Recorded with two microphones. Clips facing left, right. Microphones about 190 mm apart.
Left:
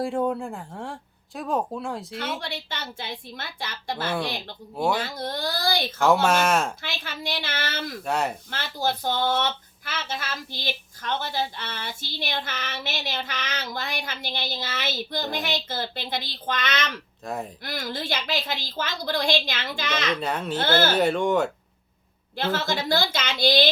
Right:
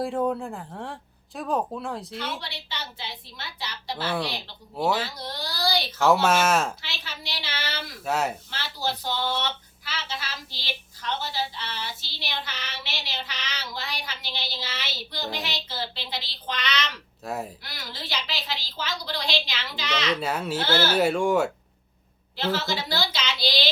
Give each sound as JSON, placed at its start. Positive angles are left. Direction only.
{"t": 0.0, "sound": "speech", "side_deg": 0}
{"t": 2.1, "sound": "speech", "side_deg": 50}
{"t": 4.8, "sound": "speech", "side_deg": 0}
{"t": 5.0, "sound": "speech", "side_deg": 50}
{"t": 6.2, "sound": "speech", "side_deg": 0}
{"t": 6.8, "sound": "speech", "side_deg": 50}
{"t": 8.0, "sound": "speech", "side_deg": -5}
{"t": 8.4, "sound": "speech", "side_deg": 50}
{"t": 17.2, "sound": "speech", "side_deg": -5}
{"t": 17.6, "sound": "speech", "side_deg": 50}
{"t": 20.1, "sound": "speech", "side_deg": -5}
{"t": 22.4, "sound": "speech", "side_deg": 50}